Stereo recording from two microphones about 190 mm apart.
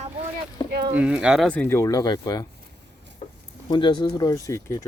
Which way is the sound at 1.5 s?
10° left (ahead or behind).